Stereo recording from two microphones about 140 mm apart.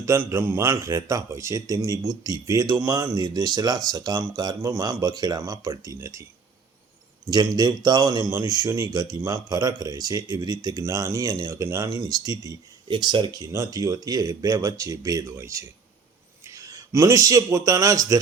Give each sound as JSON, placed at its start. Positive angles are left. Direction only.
{"t": 0.0, "sound": "speech", "side_deg": -20}
{"t": 7.3, "sound": "a man's voice", "side_deg": -30}